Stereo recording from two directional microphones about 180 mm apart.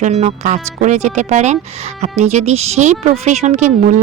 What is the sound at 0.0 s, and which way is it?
Speech, 35° right (ahead or behind).